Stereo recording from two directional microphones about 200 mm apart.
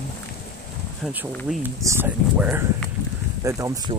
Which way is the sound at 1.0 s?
10° right (ahead or behind).